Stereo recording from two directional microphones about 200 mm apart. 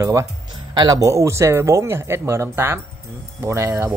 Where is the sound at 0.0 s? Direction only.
15° right (ahead or behind).